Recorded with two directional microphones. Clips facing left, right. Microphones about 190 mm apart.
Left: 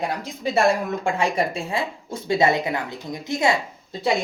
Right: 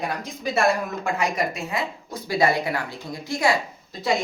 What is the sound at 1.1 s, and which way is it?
Speech, 30° left (ahead or behind).